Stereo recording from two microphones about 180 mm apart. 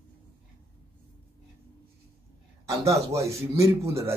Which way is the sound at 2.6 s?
15° right (ahead or behind).